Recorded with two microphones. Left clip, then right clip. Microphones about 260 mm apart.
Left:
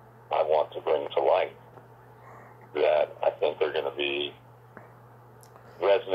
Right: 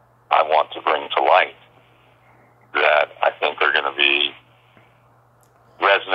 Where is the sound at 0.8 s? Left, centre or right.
Centre.